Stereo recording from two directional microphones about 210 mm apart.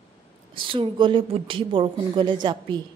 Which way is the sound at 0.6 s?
25° right (ahead or behind).